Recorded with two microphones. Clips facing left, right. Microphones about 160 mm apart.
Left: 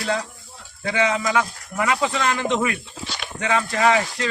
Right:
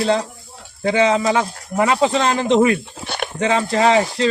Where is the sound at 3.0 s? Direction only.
55° right (ahead or behind).